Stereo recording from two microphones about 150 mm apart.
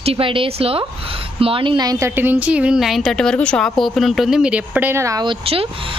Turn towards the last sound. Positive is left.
turn(degrees=-40)  # may be behind; listen again after turning